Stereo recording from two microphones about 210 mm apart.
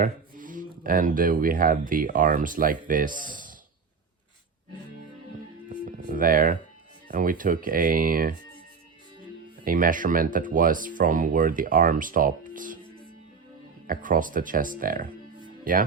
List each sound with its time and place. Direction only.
0.0 s speech: 40° right (ahead or behind)
5.6 s music: 40° right (ahead or behind)
7.1 s speech: 40° right (ahead or behind)
9.6 s speech: 40° right (ahead or behind)
13.8 s speech: 40° right (ahead or behind)